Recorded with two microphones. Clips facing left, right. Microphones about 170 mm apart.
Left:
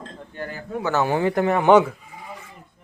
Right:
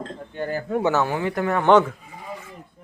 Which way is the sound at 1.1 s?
30° left (ahead or behind).